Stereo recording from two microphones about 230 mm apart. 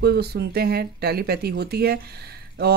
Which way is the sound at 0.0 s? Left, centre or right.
Right.